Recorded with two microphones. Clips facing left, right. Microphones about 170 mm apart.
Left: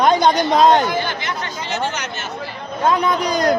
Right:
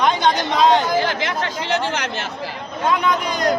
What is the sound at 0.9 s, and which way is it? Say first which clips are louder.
Speech: right 3 dB; 90° right.